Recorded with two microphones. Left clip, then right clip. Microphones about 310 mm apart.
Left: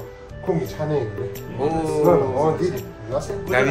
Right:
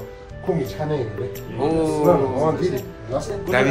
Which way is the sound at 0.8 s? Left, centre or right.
Centre.